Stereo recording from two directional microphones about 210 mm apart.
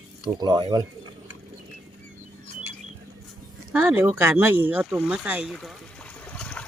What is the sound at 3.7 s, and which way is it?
Speech, 10° right (ahead or behind).